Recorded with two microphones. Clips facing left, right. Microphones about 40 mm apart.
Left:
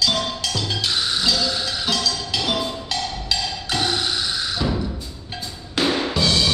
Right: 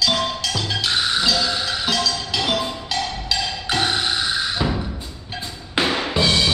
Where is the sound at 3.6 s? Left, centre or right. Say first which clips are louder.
Right 2 dB; centre.